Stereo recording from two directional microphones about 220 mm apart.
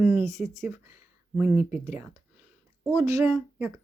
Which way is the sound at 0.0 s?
5° right (ahead or behind).